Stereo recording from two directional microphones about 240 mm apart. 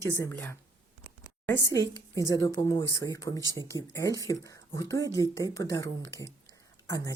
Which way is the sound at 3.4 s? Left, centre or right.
Centre.